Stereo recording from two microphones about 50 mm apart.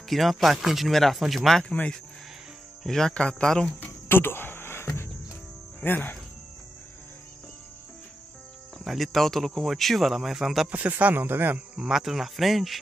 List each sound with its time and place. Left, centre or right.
0.1 s speech: centre
2.9 s speech: centre
4.1 s a sound: left
5.9 s speech: left
8.8 s speech: centre
10.7 s speech: right
11.7 s speech: centre